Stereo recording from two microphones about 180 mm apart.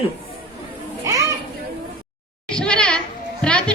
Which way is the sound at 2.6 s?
5° left (ahead or behind).